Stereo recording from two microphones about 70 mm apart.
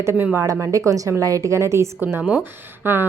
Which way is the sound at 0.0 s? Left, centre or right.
Right.